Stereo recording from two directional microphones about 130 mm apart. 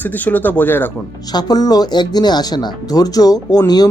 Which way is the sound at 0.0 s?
15° left (ahead or behind).